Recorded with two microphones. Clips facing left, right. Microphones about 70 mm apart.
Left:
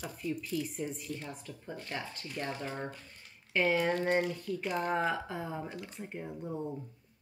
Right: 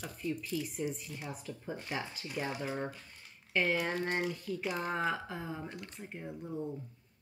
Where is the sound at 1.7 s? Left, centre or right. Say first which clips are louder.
Right 1 dB; centre.